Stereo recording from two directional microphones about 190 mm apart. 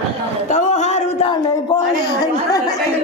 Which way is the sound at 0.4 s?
40° left (ahead or behind).